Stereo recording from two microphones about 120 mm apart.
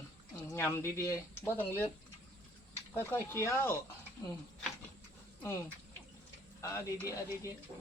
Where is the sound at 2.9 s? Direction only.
20° left (ahead or behind).